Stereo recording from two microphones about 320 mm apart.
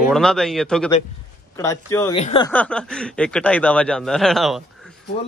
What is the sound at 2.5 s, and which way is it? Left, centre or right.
Speech, centre.